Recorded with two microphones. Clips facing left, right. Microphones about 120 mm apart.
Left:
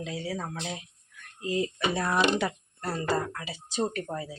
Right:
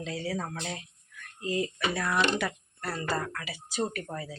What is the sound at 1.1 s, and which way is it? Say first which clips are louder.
A woman's voice: left 1 dB; 25° left (ahead or behind).